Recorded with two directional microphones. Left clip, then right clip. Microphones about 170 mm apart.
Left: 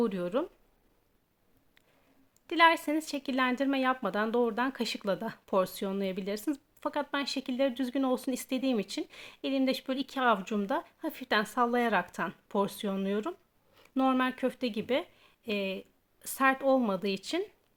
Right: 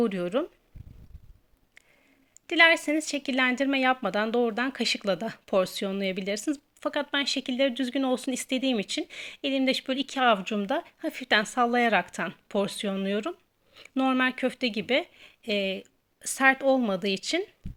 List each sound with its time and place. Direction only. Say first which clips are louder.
0.0 s speech: right 4 dB; 15° right (ahead or behind)
2.5 s speech: right 4 dB; 15° right (ahead or behind)